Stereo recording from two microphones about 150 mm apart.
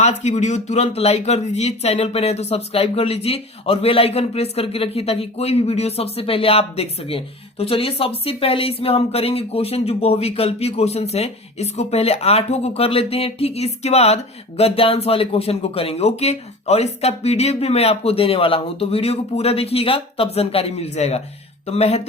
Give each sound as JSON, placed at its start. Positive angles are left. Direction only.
{"t": 0.0, "sound": "speech", "side_deg": 50}